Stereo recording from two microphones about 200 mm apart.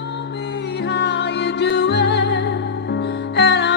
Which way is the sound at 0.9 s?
60° left (ahead or behind).